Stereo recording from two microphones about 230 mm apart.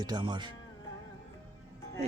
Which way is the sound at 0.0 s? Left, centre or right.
Centre.